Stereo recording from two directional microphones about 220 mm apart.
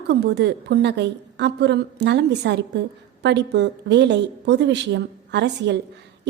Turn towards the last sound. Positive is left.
turn(degrees=-50)  # may be behind; listen again after turning